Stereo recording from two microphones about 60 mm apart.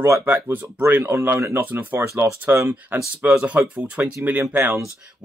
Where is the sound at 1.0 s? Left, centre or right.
Right.